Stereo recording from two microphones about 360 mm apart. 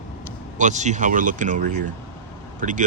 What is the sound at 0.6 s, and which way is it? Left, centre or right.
Speech, centre.